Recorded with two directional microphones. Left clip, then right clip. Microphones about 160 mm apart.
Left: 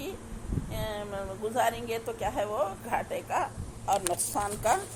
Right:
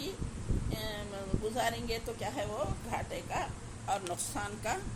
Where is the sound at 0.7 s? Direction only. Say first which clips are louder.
Left 6 dB; 15° left (ahead or behind).